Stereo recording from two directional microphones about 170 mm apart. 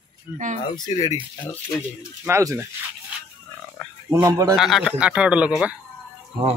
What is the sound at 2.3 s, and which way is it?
Speech, 15° right (ahead or behind).